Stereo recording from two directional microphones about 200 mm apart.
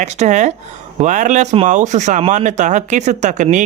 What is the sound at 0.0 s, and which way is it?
Speech, 35° right (ahead or behind).